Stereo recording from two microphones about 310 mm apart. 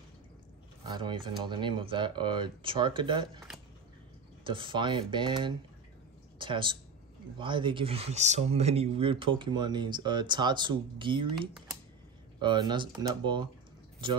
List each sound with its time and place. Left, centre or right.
0.8 s speech: centre
4.5 s speech: centre